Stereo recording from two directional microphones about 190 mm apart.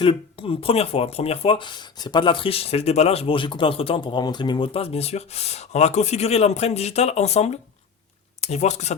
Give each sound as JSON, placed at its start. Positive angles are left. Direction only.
{"t": 0.0, "sound": "speech", "side_deg": 30}